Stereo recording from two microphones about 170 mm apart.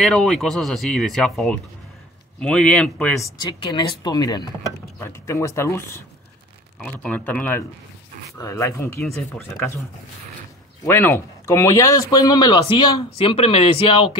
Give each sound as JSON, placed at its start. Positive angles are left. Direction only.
{"t": 0.0, "sound": "speech", "side_deg": 5}
{"t": 3.2, "sound": "speech", "side_deg": 25}
{"t": 10.8, "sound": "speech", "side_deg": 15}